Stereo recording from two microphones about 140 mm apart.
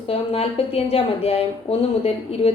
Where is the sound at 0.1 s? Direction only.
45° left (ahead or behind).